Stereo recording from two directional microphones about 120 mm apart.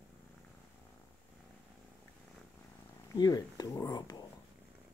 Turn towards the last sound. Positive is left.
turn(degrees=30)  # may be behind; listen again after turning